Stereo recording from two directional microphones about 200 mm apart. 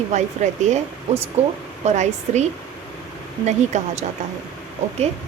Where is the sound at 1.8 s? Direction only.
35° right (ahead or behind).